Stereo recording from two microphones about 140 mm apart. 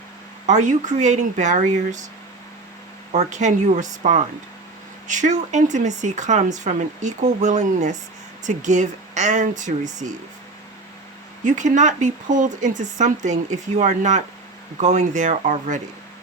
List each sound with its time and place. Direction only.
0.4 s speech: 60° right (ahead or behind)
3.1 s speech: 55° right (ahead or behind)
11.4 s speech: 60° right (ahead or behind)